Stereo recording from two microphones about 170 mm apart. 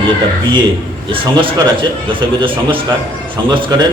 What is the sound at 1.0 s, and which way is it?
A man's voice, 30° right (ahead or behind).